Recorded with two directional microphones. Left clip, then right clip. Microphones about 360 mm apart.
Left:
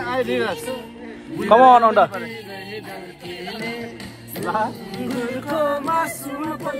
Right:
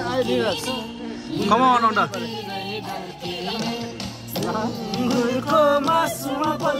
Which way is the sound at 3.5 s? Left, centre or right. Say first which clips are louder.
Even; centre.